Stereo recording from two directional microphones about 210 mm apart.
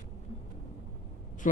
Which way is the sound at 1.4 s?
35° left (ahead or behind).